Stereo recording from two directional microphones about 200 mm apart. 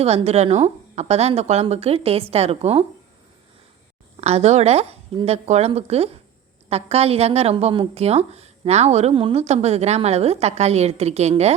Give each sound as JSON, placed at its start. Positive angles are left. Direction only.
{"t": 0.0, "sound": "a woman's voice", "side_deg": -30}
{"t": 4.2, "sound": "a woman's voice", "side_deg": -35}